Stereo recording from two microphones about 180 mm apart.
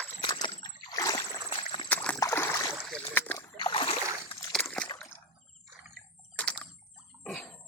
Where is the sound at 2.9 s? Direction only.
10° left (ahead or behind).